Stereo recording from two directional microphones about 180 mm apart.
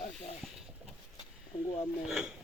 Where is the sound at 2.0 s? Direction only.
5° right (ahead or behind).